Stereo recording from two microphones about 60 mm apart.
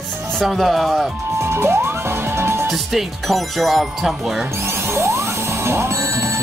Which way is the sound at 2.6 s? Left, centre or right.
Centre.